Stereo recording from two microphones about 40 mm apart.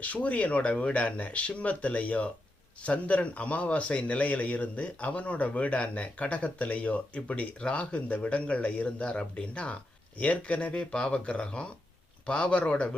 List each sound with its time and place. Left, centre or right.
0.0 s speech: left